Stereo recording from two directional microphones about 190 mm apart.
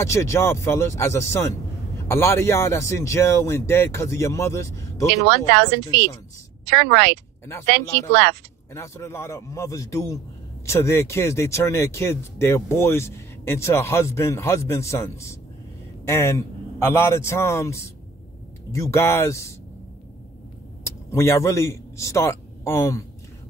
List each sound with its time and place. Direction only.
0.0 s speech: 15° left (ahead or behind)
5.3 s a woman's voice: 60° right (ahead or behind)
7.8 s speech: 15° left (ahead or behind)
20.8 s speech: 15° left (ahead or behind)